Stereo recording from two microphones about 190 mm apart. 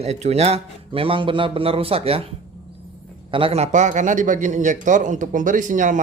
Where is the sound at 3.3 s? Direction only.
30° right (ahead or behind).